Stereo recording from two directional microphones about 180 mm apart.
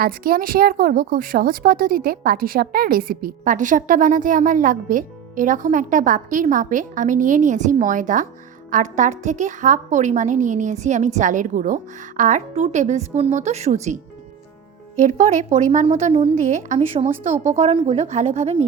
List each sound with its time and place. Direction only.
0.0 s a woman's voice: 55° right (ahead or behind)
14.9 s a woman's voice: 45° right (ahead or behind)